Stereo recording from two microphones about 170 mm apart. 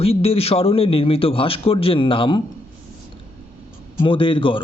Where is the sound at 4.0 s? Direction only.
30° left (ahead or behind).